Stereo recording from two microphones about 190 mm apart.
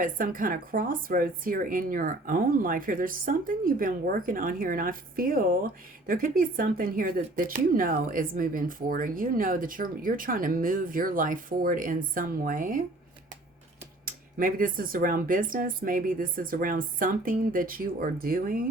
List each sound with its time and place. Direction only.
0.0 s speech: 45° right (ahead or behind)
14.0 s speech: 45° right (ahead or behind)